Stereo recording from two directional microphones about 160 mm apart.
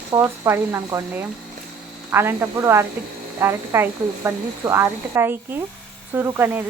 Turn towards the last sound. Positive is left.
turn(degrees=-15)  # may be behind; listen again after turning